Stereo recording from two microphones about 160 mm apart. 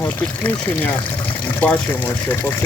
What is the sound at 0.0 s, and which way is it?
Speech, 10° left (ahead or behind).